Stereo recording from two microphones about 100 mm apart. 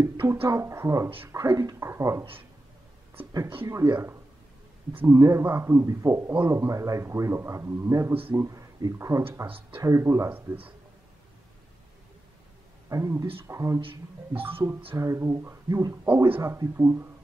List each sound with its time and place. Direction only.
0.0 s a man's voice: 25° right (ahead or behind)
3.6 s a man's voice: 30° right (ahead or behind)
4.9 s a man's voice: 30° right (ahead or behind)
10.3 s speech: 15° right (ahead or behind)
12.9 s a man's voice: 30° right (ahead or behind)
13.7 s speech: 65° right (ahead or behind)
14.4 s a man's voice: 20° right (ahead or behind)